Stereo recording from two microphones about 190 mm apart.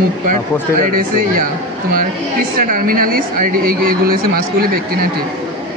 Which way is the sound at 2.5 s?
50° right (ahead or behind).